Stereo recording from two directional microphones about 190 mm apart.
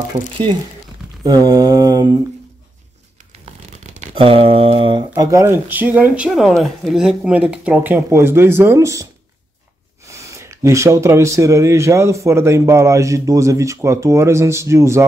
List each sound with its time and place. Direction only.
1.2 s mantra: 20° right (ahead or behind)
3.4 s speech: 35° right (ahead or behind); by 9.0 s 15° right (ahead or behind)
10.0 s speech: 15° right (ahead or behind)